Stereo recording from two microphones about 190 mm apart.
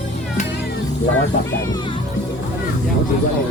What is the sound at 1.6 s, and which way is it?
Speech, 20° left (ahead or behind).